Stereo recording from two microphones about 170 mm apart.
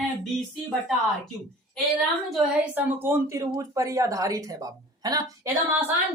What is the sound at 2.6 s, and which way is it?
A woman's voice, 10° right (ahead or behind).